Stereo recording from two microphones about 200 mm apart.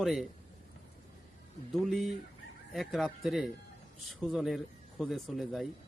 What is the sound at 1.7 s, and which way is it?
Speech, centre (ahead or behind).